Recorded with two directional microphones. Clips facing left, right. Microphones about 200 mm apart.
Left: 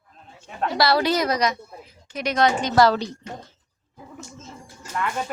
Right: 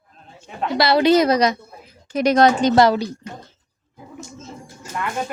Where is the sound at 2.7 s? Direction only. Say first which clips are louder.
Left 1 dB; 20° right (ahead or behind).